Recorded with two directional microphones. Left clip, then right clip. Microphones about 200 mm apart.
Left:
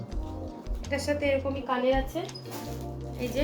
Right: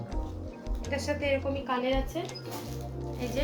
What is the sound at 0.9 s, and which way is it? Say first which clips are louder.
A woman's voice: left 3 dB; 5° left (ahead or behind).